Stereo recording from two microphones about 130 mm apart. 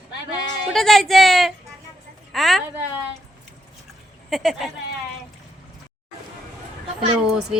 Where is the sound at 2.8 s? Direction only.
10° right (ahead or behind).